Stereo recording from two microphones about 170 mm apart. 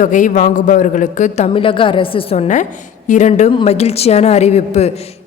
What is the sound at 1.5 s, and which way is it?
Speech, 30° left (ahead or behind).